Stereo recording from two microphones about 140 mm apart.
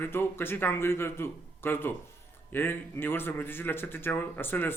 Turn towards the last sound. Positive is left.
turn(degrees=15)  # may be behind; listen again after turning